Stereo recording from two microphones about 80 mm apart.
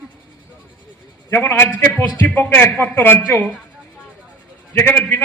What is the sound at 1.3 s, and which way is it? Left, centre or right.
A man's voice, left.